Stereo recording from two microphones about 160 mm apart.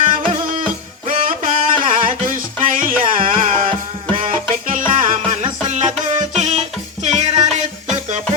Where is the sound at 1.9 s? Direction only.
55° right (ahead or behind).